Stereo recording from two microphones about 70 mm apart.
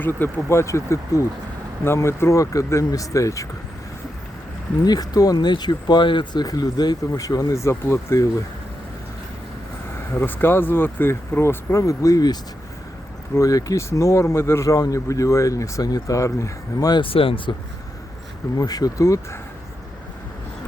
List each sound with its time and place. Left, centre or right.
0.0 s speech: left
4.8 s speech: left
7.2 s speech: left
10.2 s speech: left
13.3 s speech: left
15.8 s speech: left
17.5 s speech: left
18.5 s speech: left
18.9 s speech: left